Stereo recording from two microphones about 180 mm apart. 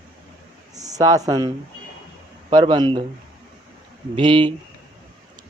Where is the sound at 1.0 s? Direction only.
20° right (ahead or behind).